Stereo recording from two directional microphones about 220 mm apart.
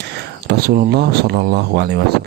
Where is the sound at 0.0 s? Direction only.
50° right (ahead or behind).